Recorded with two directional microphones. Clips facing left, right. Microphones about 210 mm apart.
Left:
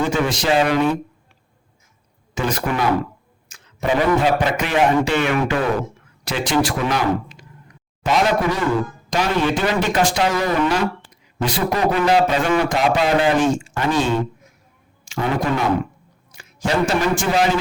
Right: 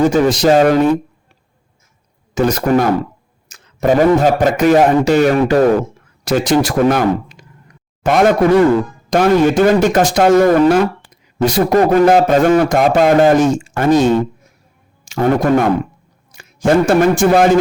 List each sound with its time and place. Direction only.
0.0 s a man's voice: 40° right (ahead or behind)
2.3 s a man's voice: 40° right (ahead or behind)